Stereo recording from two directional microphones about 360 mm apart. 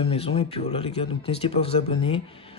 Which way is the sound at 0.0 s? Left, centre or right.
Centre.